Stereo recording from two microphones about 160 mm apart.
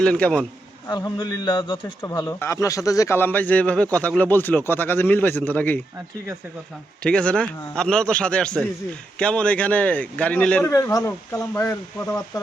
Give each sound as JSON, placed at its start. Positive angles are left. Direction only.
{"t": 0.0, "sound": "a man's voice", "side_deg": 5}
{"t": 0.9, "sound": "a man's voice", "side_deg": 25}
{"t": 7.0, "sound": "a man's voice", "side_deg": 5}
{"t": 10.7, "sound": "speech", "side_deg": 20}